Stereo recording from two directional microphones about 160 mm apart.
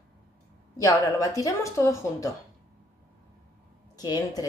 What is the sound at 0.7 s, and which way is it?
Speech, 20° left (ahead or behind).